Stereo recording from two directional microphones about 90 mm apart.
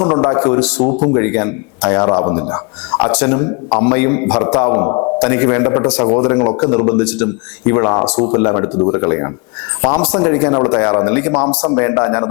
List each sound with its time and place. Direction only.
0.0 s a man's voice: 15° left (ahead or behind)
5.2 s a man's voice: 15° left (ahead or behind)
9.8 s a man's voice: 10° left (ahead or behind)